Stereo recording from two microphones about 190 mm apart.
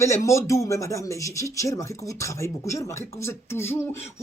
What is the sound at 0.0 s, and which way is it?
A man's voice, 15° left (ahead or behind).